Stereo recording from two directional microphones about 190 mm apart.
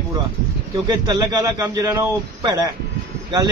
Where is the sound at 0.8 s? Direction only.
20° right (ahead or behind).